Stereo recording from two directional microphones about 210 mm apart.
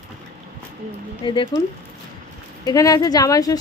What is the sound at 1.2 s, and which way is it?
Speech, 25° left (ahead or behind).